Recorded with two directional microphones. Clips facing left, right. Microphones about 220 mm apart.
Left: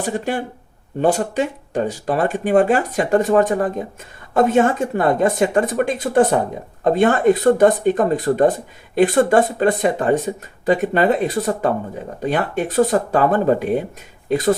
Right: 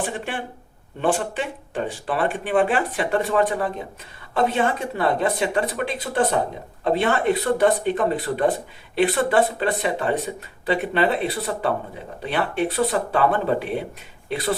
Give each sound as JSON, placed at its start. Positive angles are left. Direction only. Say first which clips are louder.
{"t": 0.0, "sound": "speech", "louder": "left 6 dB", "side_deg": 40}